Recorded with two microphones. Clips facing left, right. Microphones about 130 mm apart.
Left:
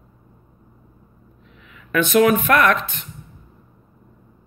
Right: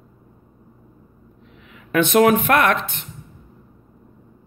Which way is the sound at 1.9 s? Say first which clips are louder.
Right 1 dB; 55° right (ahead or behind).